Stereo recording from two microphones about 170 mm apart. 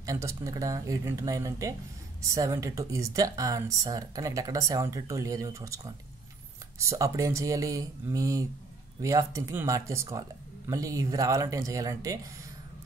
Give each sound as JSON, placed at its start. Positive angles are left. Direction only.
{"t": 0.0, "sound": "speech", "side_deg": -20}